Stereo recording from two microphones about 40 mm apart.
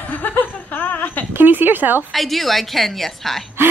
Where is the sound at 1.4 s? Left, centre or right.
Right.